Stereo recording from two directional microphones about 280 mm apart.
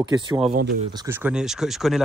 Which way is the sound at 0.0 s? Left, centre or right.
Centre.